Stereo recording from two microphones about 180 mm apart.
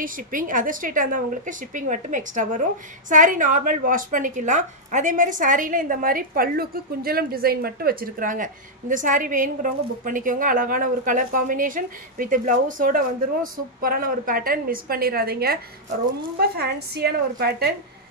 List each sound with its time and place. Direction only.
0.0 s a woman's voice: 50° right (ahead or behind)